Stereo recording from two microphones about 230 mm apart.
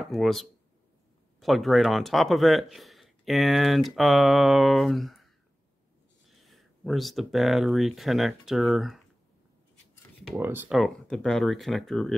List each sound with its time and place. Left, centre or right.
0.0 s speech: centre
10.3 s speech: centre